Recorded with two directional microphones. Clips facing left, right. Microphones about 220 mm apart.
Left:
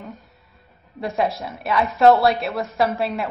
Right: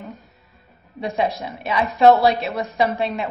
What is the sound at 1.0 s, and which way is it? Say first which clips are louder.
A woman's voice: even; centre (ahead or behind).